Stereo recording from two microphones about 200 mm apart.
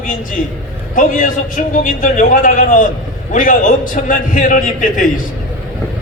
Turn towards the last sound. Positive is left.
turn(degrees=45)  # may be behind; listen again after turning